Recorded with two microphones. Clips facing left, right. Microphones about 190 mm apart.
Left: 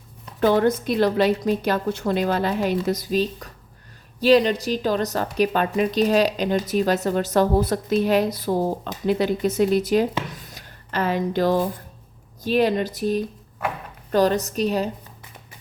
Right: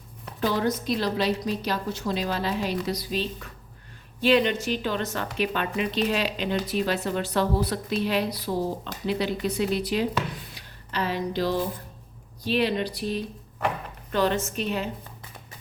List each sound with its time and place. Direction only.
0.3 s a woman's voice: 55° left (ahead or behind)
10.5 s a sound: 50° left (ahead or behind)
12.4 s a woman's voice: 45° left (ahead or behind)